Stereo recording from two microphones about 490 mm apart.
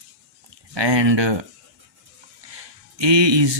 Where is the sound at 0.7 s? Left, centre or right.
Right.